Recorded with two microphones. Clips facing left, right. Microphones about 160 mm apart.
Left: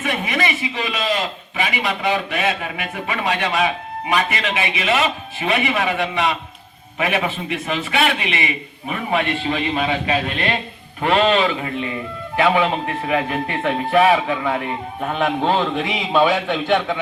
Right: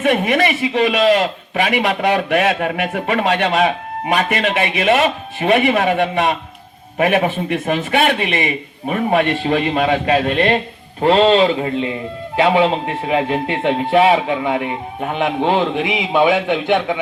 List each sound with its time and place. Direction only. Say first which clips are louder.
0.0 s a man's voice: right 7 dB; 60° right (ahead or behind); by 10.6 s 45° right (ahead or behind)
11.0 s a man's voice: right 5 dB; 30° right (ahead or behind); by 17.0 s 15° right (ahead or behind)